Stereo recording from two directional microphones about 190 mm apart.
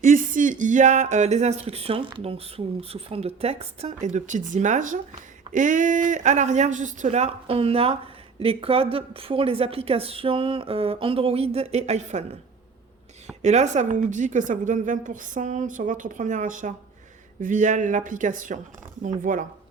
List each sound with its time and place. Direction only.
0.0 s a woman's voice: 45° right (ahead or behind)
13.4 s a woman's voice: 35° right (ahead or behind)